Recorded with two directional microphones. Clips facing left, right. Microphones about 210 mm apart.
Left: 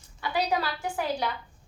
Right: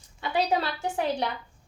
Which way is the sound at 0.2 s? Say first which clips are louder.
Right 2 dB; 25° right (ahead or behind).